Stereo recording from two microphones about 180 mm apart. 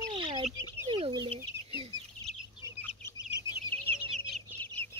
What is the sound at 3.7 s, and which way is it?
Chicken, 10° left (ahead or behind).